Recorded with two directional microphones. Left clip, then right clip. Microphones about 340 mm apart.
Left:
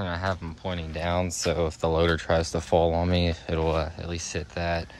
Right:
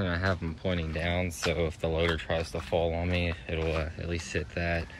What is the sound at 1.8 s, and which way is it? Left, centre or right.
Speech, left.